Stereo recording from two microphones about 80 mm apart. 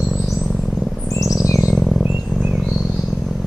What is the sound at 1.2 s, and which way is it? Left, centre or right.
Chirp, centre.